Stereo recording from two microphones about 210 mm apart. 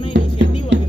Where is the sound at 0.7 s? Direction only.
60° right (ahead or behind).